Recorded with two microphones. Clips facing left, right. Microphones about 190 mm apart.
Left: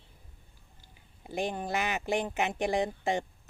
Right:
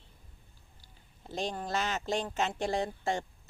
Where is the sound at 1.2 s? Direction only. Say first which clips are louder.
Left 3 dB; 15° left (ahead or behind).